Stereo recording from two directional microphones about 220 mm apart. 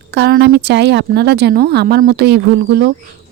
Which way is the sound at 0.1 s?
50° right (ahead or behind).